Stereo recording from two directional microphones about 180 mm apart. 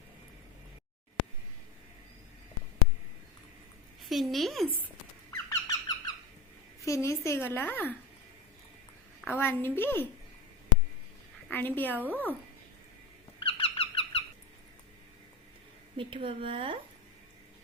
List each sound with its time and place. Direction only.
4.1 s speech: centre (ahead or behind)
5.3 s squeak: 20° left (ahead or behind)
6.8 s a woman's voice: 15° left (ahead or behind)
9.2 s a woman's voice: 10° left (ahead or behind)
11.4 s a woman's voice: 10° left (ahead or behind)
12.0 s speech: 10° right (ahead or behind)
13.4 s squeak: 30° left (ahead or behind)
16.0 s a woman's voice: 30° right (ahead or behind)